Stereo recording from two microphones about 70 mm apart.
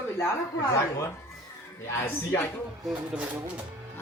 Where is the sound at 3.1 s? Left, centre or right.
Centre.